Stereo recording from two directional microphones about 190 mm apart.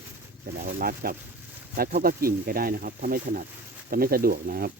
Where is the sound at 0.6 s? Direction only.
50° right (ahead or behind).